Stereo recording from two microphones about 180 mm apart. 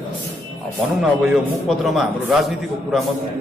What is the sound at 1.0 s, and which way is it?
A man's voice, centre (ahead or behind).